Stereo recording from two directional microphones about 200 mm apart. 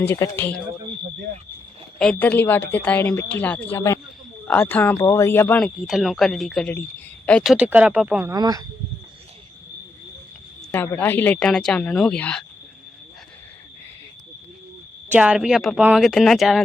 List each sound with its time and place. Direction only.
0.1 s speech: 10° left (ahead or behind)
2.0 s speech: 5° left (ahead or behind)
8.3 s speech: 20° right (ahead or behind)
10.7 s speech: 10° left (ahead or behind)
15.1 s speech: 5° right (ahead or behind)